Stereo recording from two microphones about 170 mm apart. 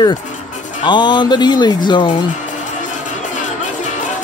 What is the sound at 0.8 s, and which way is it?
Speech, 25° left (ahead or behind).